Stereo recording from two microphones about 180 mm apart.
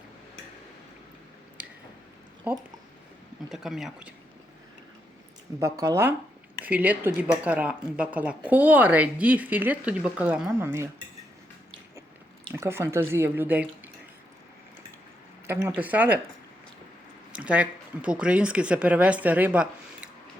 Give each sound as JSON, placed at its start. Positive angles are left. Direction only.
{"t": 2.5, "sound": "a woman's voice", "side_deg": -10}
{"t": 5.5, "sound": "a woman's voice", "side_deg": -15}
{"t": 12.5, "sound": "a woman's voice", "side_deg": -15}
{"t": 15.4, "sound": "a woman's voice", "side_deg": -10}
{"t": 17.3, "sound": "speech", "side_deg": -5}